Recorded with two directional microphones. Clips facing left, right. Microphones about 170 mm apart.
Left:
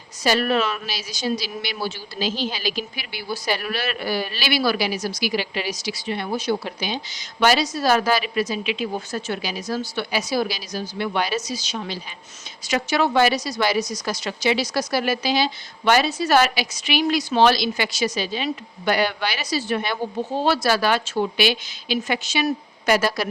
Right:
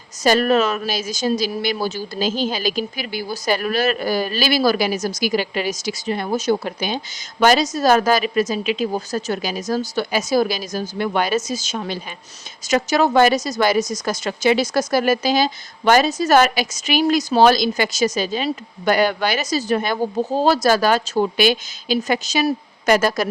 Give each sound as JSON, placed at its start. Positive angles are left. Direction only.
{"t": 0.2, "sound": "speech", "side_deg": -45}